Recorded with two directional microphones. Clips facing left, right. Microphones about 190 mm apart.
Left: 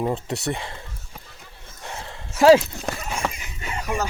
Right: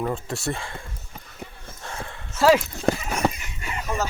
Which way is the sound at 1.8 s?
20° left (ahead or behind).